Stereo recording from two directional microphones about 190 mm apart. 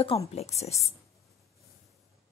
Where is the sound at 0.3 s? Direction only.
35° left (ahead or behind).